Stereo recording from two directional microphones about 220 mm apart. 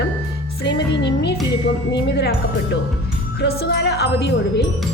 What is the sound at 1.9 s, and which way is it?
Speech, 50° left (ahead or behind).